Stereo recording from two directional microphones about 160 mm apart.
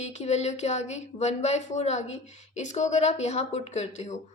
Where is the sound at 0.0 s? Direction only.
45° left (ahead or behind).